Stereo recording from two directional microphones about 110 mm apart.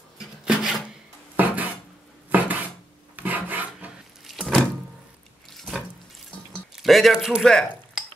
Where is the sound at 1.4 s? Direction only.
15° right (ahead or behind).